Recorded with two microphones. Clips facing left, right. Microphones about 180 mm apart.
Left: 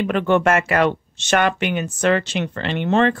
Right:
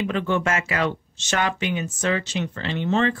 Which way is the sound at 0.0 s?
60° left (ahead or behind).